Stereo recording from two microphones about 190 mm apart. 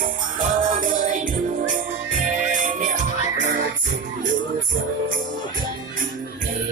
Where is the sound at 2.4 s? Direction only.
40° right (ahead or behind).